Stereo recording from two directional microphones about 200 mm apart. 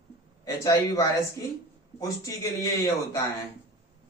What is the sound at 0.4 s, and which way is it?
A man's voice, 15° left (ahead or behind).